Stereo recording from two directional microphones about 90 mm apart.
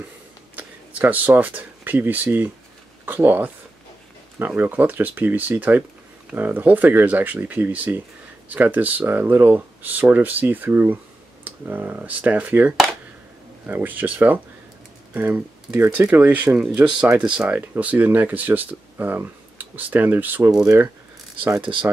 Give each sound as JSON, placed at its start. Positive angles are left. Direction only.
{"t": 0.6, "sound": "speech", "side_deg": -20}
{"t": 17.6, "sound": "speech", "side_deg": -20}